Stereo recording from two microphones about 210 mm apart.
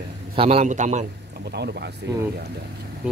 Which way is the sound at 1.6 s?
50° right (ahead or behind).